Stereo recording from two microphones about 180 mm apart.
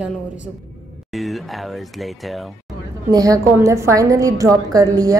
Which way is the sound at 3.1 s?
20° right (ahead or behind).